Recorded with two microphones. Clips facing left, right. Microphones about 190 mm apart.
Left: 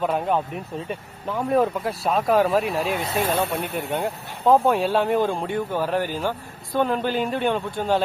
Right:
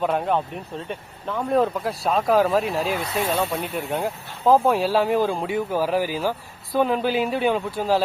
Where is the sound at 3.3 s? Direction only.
55° left (ahead or behind).